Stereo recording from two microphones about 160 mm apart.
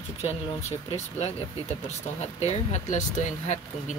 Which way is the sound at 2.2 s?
45° left (ahead or behind).